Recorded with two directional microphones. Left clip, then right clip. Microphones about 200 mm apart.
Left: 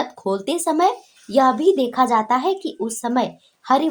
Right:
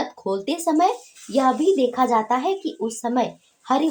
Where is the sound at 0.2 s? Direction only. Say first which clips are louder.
Left 2 dB; 45° left (ahead or behind).